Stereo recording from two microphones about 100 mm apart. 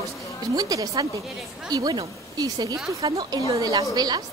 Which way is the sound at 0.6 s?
40° right (ahead or behind).